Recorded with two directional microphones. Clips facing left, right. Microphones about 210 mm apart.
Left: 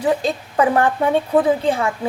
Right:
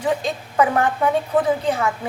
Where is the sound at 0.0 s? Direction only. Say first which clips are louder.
Left 3 dB; 35° left (ahead or behind).